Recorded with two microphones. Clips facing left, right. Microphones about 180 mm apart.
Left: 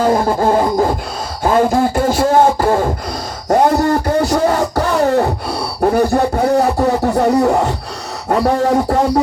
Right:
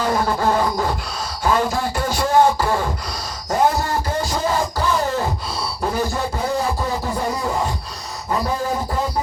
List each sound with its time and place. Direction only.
0.0 s beatboxing: 45° left (ahead or behind)
3.5 s a sound: 60° left (ahead or behind)
8.3 s music: 70° left (ahead or behind)